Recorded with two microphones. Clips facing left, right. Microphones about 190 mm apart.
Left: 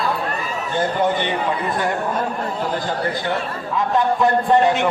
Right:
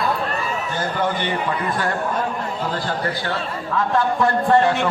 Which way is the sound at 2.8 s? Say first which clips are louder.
Left 1 dB; 20° left (ahead or behind).